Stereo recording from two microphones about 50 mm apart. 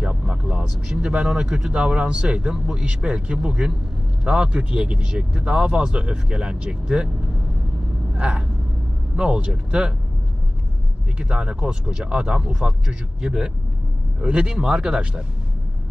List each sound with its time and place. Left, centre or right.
0.3 s speech: centre
8.1 s speech: right
11.1 s speech: centre